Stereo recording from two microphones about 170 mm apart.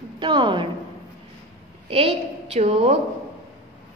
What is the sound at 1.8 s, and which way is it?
A woman's voice, 35° right (ahead or behind).